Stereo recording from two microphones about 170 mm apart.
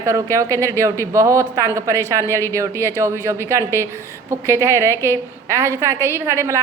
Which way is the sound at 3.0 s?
15° right (ahead or behind).